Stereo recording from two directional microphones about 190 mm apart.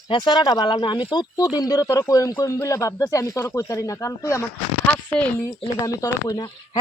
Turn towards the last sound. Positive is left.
turn(degrees=20)  # may be behind; listen again after turning